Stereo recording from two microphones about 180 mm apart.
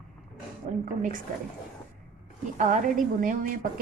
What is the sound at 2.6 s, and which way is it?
Speech, 45° right (ahead or behind).